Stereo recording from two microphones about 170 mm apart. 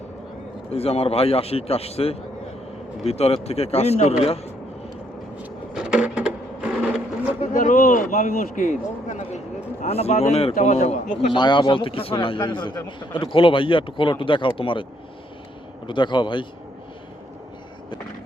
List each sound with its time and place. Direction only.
0.7 s a man's voice: 35° left (ahead or behind)
5.4 s sewing machine: 5° right (ahead or behind)
7.5 s a man's voice: 50° left (ahead or behind)
11.3 s a man's voice: 25° left (ahead or behind)
15.9 s speech: 30° left (ahead or behind)